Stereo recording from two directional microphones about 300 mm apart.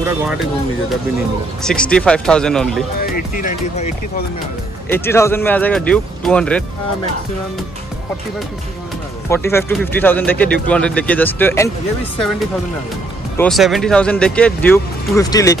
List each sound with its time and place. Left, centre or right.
1.6 s speech: centre
3.0 s speech: left
4.8 s speech: centre
9.3 s speech: centre
13.4 s speech: centre